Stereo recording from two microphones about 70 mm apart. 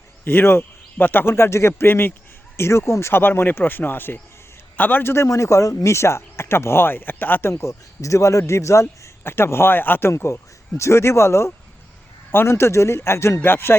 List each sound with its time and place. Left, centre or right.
0.3 s speech: left
7.6 s speech: left
10.1 s speech: left